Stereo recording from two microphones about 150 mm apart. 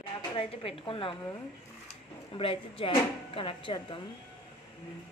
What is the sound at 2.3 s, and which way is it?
A woman's voice, 35° left (ahead or behind).